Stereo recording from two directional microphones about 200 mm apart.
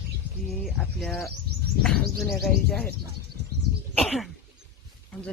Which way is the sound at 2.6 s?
50° left (ahead or behind).